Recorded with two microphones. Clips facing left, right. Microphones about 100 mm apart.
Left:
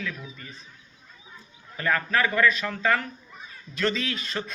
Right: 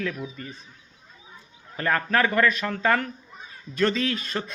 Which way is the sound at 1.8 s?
35° right (ahead or behind).